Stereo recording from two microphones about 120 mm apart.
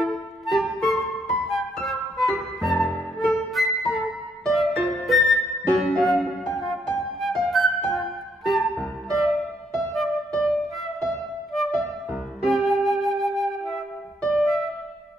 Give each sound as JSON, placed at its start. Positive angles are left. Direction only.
{"t": 0.0, "sound": "music", "side_deg": 0}